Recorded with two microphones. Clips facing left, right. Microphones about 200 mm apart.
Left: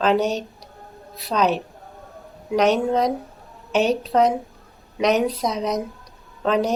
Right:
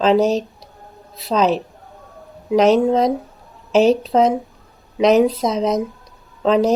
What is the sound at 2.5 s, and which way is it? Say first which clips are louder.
Speech: right 5 dB; centre (ahead or behind).